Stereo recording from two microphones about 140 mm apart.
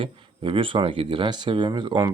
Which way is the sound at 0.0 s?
40° right (ahead or behind).